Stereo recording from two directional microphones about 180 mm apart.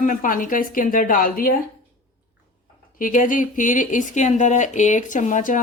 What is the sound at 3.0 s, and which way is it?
Speech, 45° left (ahead or behind).